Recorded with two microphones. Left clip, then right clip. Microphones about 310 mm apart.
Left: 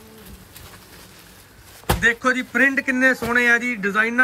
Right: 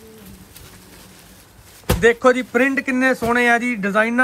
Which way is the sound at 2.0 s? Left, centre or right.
Centre.